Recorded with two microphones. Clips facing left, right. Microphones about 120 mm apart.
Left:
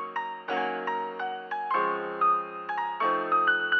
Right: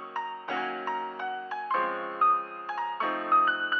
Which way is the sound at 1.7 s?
15° right (ahead or behind).